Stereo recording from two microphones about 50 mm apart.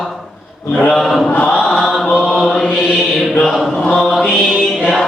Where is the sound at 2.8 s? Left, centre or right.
Centre.